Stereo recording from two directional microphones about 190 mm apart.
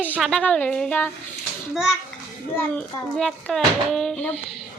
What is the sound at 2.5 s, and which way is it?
A woman's voice, 5° left (ahead or behind).